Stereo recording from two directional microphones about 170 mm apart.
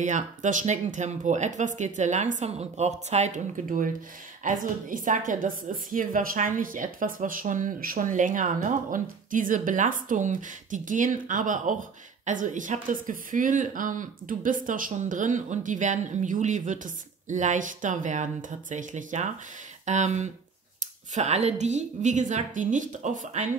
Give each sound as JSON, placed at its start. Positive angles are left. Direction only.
{"t": 0.0, "sound": "a woman's voice", "side_deg": -45}